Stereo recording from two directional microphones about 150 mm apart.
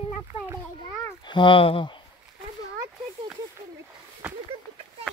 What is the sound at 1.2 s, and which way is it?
Speech, 30° left (ahead or behind).